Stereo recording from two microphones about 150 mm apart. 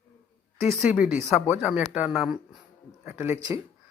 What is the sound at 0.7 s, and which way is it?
Speech, 5° right (ahead or behind).